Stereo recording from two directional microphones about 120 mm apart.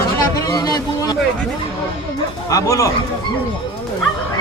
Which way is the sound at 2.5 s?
25° left (ahead or behind).